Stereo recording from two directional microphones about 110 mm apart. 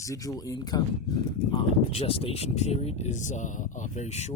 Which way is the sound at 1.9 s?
60° left (ahead or behind).